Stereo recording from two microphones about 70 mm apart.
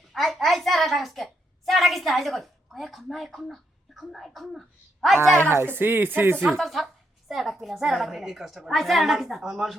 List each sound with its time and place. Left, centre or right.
0.1 s a child's voice: centre
5.1 s speech: right
6.5 s a woman's voice: centre